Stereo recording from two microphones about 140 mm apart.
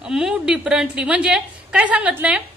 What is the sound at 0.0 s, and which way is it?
A woman's voice, 5° right (ahead or behind).